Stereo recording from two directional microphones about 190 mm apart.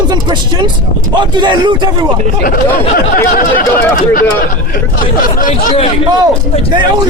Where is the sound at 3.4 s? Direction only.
50° left (ahead or behind).